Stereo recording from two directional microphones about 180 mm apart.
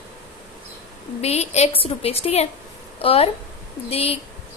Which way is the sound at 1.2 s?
35° left (ahead or behind).